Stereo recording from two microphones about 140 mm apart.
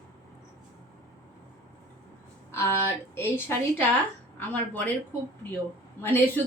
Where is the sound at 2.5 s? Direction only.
20° left (ahead or behind).